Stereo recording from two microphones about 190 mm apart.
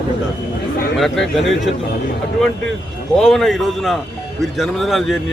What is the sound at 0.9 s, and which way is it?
Speech, centre (ahead or behind).